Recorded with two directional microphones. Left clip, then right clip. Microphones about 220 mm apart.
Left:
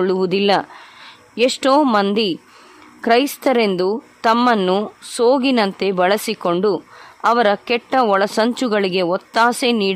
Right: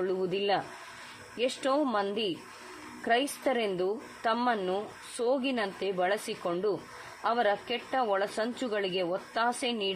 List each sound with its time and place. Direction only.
0.0 s a woman's voice: 50° left (ahead or behind)